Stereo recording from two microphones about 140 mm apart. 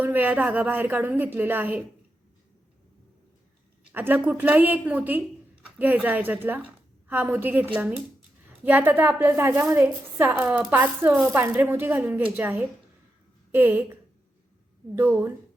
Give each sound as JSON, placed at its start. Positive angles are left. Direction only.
{"t": 0.0, "sound": "a woman's voice", "side_deg": -15}
{"t": 3.9, "sound": "a woman's voice", "side_deg": -15}